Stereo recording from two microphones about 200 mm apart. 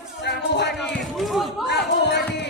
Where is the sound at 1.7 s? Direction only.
60° left (ahead or behind).